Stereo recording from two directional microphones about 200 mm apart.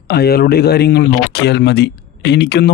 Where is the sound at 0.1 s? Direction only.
50° left (ahead or behind).